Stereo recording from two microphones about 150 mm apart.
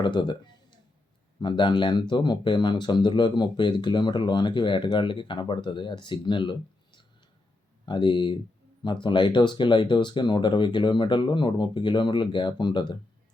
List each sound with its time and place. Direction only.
0.0 s speech: 30° left (ahead or behind)